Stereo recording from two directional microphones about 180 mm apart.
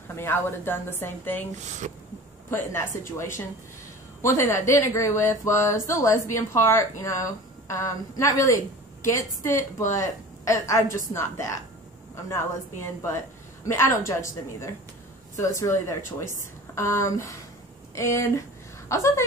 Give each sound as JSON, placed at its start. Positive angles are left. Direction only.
{"t": 0.1, "sound": "speech", "side_deg": 15}
{"t": 2.5, "sound": "speech", "side_deg": 15}